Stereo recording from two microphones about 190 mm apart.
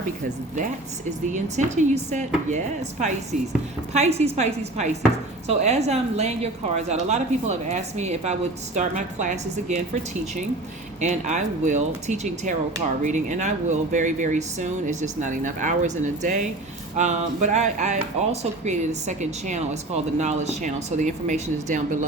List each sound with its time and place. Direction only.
1.3 s a woman's voice: 40° right (ahead or behind)